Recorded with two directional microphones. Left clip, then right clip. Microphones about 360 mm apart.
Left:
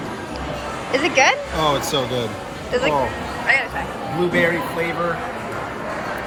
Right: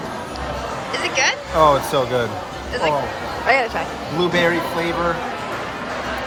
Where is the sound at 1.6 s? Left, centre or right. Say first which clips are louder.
Right 5 dB; centre.